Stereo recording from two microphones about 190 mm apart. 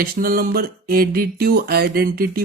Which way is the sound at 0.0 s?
50° right (ahead or behind).